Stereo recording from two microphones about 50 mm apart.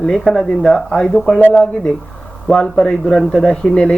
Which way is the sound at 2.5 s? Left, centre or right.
Centre.